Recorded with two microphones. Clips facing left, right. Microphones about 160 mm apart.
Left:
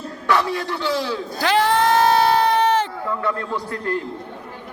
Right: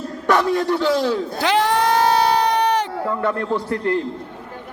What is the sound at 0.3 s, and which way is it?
Speech, 45° right (ahead or behind).